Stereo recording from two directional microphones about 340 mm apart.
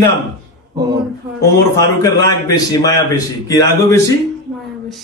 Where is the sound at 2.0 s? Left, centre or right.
Centre.